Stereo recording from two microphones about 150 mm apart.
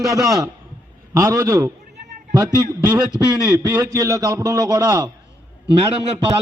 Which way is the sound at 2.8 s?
25° right (ahead or behind).